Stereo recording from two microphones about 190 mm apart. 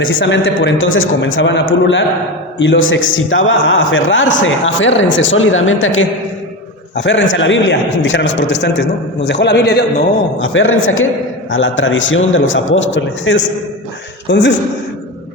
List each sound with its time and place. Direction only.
0.0 s a man's voice: 90° left
2.6 s a man's voice: 85° left
6.9 s a man's voice: 70° left (ahead or behind)
9.2 s a man's voice: 65° left (ahead or behind)
10.4 s a man's voice: 90° left; by 14.5 s 70° left (ahead or behind)